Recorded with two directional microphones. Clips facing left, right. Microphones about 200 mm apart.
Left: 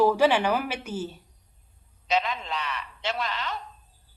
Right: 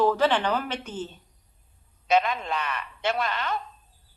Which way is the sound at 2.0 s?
50° right (ahead or behind).